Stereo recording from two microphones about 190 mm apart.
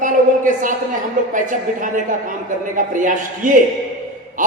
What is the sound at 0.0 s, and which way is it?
Speech, 45° right (ahead or behind).